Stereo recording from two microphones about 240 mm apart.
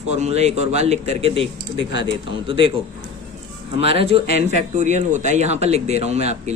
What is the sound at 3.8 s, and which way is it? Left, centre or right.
Speech, right.